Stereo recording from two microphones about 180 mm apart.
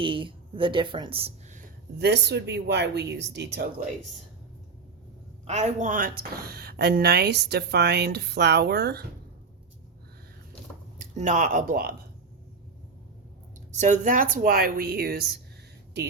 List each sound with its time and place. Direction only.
0.0 s a woman's voice: 30° right (ahead or behind)
2.0 s speech: 70° right (ahead or behind)
5.5 s a woman's voice: 40° right (ahead or behind); by 9.0 s 65° right (ahead or behind)
10.9 s speech: 45° right (ahead or behind)
13.7 s speech: 40° right (ahead or behind); by 15.2 s 60° right (ahead or behind)